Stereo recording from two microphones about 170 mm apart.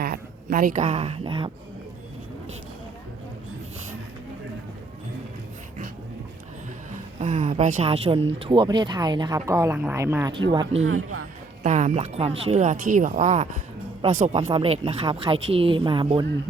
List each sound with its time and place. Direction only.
0.0 s speech: 55° right (ahead or behind); by 1.5 s 30° right (ahead or behind)
6.9 s speech: 45° right (ahead or behind); by 10.8 s 25° right (ahead or behind)
11.6 s speech: 45° right (ahead or behind); by 16.2 s 30° right (ahead or behind)